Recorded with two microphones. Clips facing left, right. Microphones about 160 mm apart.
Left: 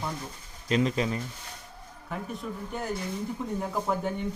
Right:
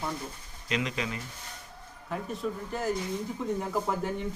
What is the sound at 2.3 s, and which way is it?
Speech, centre (ahead or behind).